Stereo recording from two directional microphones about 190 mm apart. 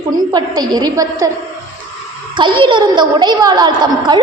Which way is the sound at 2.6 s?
25° right (ahead or behind).